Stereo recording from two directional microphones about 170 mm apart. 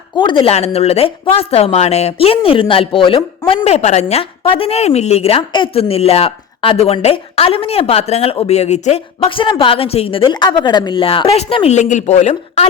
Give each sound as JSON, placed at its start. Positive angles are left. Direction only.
{"t": 0.2, "sound": "a woman's voice", "side_deg": 30}